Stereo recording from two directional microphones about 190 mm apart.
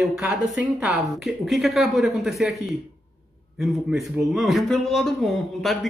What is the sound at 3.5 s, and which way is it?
Speech, centre (ahead or behind).